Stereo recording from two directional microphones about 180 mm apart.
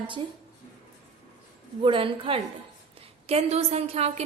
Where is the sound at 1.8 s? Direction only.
30° right (ahead or behind).